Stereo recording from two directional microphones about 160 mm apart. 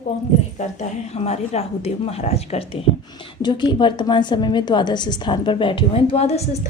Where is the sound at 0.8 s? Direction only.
40° left (ahead or behind).